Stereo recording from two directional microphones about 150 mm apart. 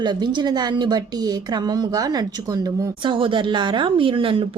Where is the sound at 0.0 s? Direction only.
30° right (ahead or behind).